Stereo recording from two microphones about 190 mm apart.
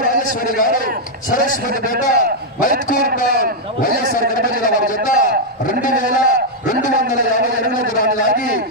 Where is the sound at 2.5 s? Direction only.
45° left (ahead or behind).